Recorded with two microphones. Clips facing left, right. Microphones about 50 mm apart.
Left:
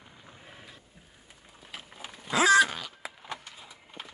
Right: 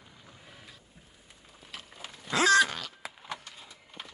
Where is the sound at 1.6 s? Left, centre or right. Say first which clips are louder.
Left 1 dB; centre.